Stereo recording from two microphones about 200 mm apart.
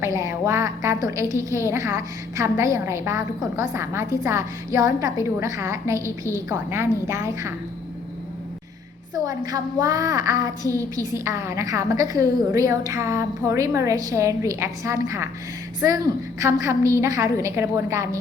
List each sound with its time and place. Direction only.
0.0 s a woman's voice: 15° right (ahead or behind)
9.1 s a woman's voice: 20° right (ahead or behind)
16.4 s a woman's voice: 15° right (ahead or behind)